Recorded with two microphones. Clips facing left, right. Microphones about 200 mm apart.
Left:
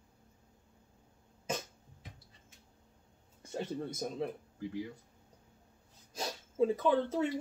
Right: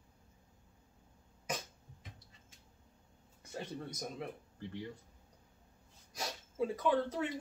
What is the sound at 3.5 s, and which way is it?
Speech, 25° left (ahead or behind).